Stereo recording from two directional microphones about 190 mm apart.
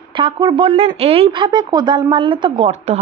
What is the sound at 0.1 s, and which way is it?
Speech, 25° right (ahead or behind).